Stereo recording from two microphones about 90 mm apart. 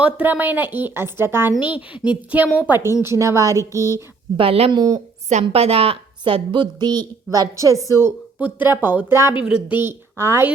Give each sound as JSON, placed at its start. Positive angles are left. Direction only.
{"t": 0.0, "sound": "a woman's voice", "side_deg": -20}
{"t": 1.5, "sound": "a woman's voice", "side_deg": 70}
{"t": 1.9, "sound": "speech", "side_deg": -15}
{"t": 3.0, "sound": "speech", "side_deg": -35}
{"t": 3.8, "sound": "a woman's voice", "side_deg": 35}
{"t": 4.4, "sound": "speech", "side_deg": -90}
{"t": 4.7, "sound": "a woman's voice", "side_deg": -50}
{"t": 5.5, "sound": "a woman's voice", "side_deg": -90}
{"t": 7.3, "sound": "speech", "side_deg": -35}
{"t": 8.4, "sound": "a woman's voice", "side_deg": -15}
{"t": 9.3, "sound": "a woman's voice", "side_deg": -10}